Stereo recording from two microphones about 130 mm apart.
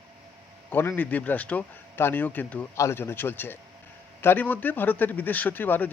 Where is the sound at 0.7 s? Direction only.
15° left (ahead or behind).